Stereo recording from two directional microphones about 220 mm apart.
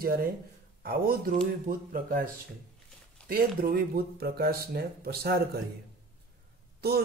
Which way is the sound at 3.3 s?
40° right (ahead or behind).